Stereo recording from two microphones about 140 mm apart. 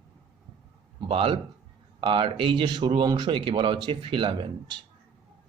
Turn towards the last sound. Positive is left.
turn(degrees=-35)  # may be behind; listen again after turning